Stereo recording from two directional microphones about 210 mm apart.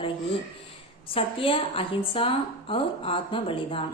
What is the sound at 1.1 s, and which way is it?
A woman's voice, 25° left (ahead or behind).